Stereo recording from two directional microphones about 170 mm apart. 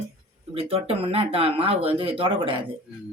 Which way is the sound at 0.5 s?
35° right (ahead or behind).